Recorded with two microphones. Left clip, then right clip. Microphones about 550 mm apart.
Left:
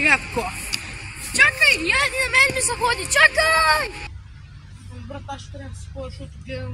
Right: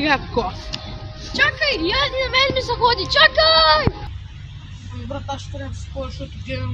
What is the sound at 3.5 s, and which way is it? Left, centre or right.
Speech, left.